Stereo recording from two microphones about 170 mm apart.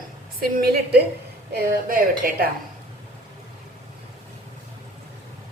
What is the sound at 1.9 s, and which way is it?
Speech, 55° right (ahead or behind).